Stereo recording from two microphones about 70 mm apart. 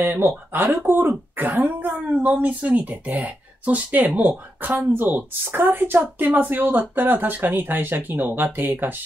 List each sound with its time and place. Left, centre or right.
0.0 s speech: right